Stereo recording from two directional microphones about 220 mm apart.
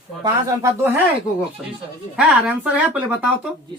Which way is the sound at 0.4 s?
10° right (ahead or behind).